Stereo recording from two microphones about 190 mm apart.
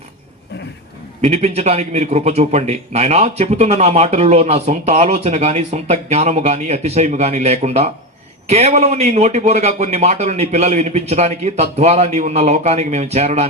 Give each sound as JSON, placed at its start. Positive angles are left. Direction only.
{"t": 1.2, "sound": "a man's voice", "side_deg": -35}